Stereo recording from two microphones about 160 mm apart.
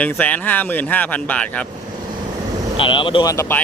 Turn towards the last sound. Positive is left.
turn(degrees=15)  # may be behind; listen again after turning